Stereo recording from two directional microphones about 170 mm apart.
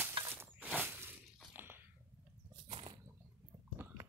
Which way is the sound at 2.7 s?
30° right (ahead or behind).